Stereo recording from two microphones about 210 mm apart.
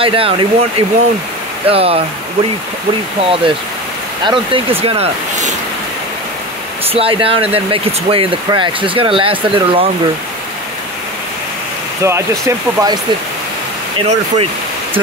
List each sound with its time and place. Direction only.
0.0 s speech: 25° right (ahead or behind)
3.2 s speech: 25° right (ahead or behind)
6.9 s speech: 25° right (ahead or behind)
12.0 s speech: 15° right (ahead or behind)
13.9 s speech: 30° right (ahead or behind)